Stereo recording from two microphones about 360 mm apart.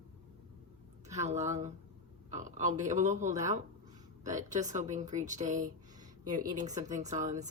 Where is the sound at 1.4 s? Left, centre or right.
Centre.